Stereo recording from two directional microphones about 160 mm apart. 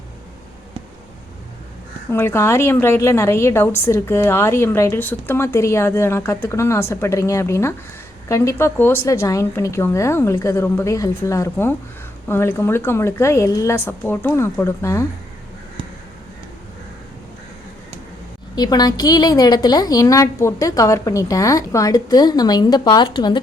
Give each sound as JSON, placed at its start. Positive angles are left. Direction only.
{"t": 2.0, "sound": "a woman's voice", "side_deg": 15}
{"t": 18.5, "sound": "a woman's voice", "side_deg": 25}